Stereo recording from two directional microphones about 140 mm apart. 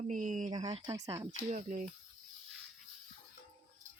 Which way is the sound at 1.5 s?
60° right (ahead or behind).